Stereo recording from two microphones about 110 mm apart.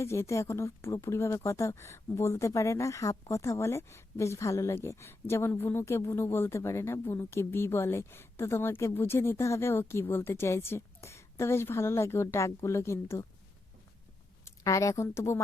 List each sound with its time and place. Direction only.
0.0 s speech: 25° left (ahead or behind)
14.4 s speech: 30° left (ahead or behind)